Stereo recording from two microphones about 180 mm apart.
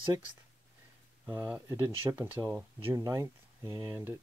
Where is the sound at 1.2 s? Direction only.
10° right (ahead or behind).